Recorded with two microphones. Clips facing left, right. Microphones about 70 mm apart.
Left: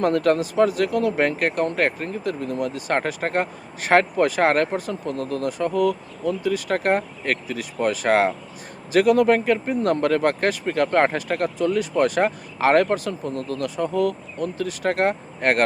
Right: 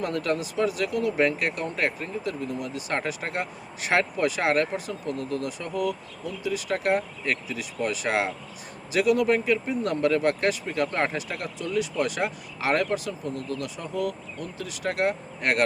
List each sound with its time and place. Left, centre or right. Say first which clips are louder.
0.0 s speech: left 8 dB; left